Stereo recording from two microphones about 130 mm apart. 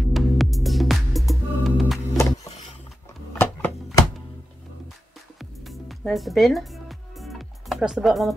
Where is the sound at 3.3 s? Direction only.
15° left (ahead or behind).